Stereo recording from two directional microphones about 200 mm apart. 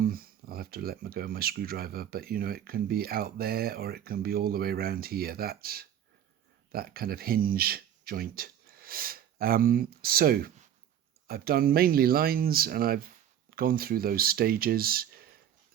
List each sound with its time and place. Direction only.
0.0 s speech: 45° right (ahead or behind)